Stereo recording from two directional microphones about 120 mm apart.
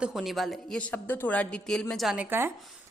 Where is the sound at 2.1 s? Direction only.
20° right (ahead or behind).